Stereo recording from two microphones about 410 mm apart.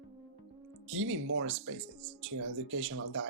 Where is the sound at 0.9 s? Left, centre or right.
Right.